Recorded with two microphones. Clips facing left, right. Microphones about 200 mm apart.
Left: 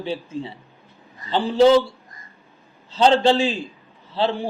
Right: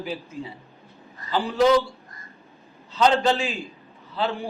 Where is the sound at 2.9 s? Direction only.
30° left (ahead or behind).